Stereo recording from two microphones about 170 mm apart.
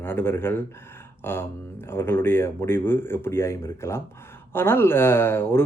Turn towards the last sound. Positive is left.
turn(degrees=15)  # may be behind; listen again after turning